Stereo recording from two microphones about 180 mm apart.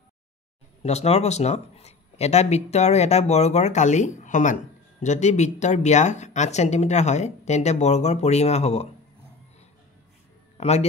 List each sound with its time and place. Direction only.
0.8 s speech: 35° left (ahead or behind)
10.6 s speech: 35° left (ahead or behind)